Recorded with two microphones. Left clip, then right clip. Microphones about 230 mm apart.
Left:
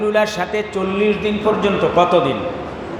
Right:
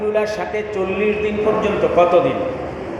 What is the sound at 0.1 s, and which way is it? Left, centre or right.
Mantra, left.